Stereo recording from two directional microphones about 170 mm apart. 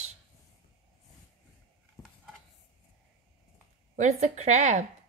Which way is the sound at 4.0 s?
45° right (ahead or behind).